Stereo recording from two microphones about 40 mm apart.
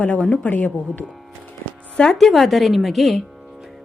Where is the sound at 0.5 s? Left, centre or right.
Left.